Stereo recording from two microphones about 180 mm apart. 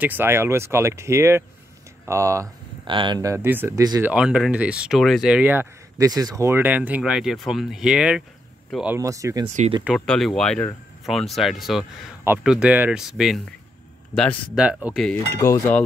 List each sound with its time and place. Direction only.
0.0 s speech: 10° right (ahead or behind)
2.9 s speech: 25° right (ahead or behind)
4.0 s speech: 5° right (ahead or behind)
9.6 s speech: 30° right (ahead or behind)
9.9 s speech: 5° left (ahead or behind)
15.4 s speech: 15° left (ahead or behind)